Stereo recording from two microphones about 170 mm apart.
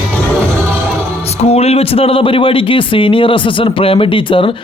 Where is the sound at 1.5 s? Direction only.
40° left (ahead or behind).